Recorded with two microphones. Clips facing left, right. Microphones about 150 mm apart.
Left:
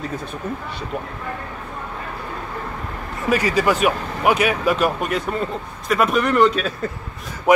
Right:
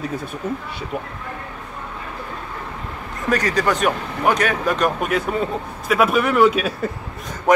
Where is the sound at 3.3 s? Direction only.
10° left (ahead or behind); by 6.9 s 10° right (ahead or behind).